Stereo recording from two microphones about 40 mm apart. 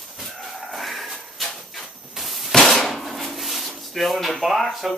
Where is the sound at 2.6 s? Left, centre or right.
Centre.